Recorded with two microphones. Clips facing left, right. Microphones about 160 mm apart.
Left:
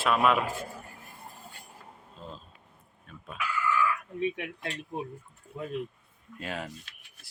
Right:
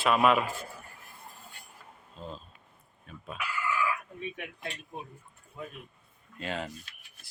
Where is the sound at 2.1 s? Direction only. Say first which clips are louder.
Right 3 dB; centre (ahead or behind).